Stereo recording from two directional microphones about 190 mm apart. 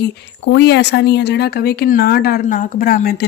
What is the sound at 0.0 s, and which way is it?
Speech, 60° left (ahead or behind).